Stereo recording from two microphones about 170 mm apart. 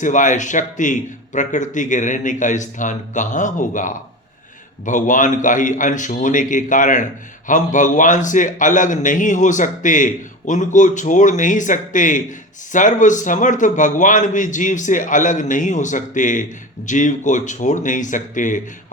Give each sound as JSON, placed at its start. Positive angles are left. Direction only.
{"t": 0.0, "sound": "a man's voice", "side_deg": 50}